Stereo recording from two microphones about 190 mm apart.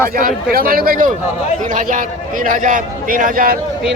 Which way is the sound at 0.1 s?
50° right (ahead or behind).